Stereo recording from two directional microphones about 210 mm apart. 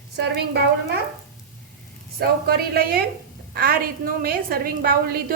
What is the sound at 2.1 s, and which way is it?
A woman's voice, 50° right (ahead or behind).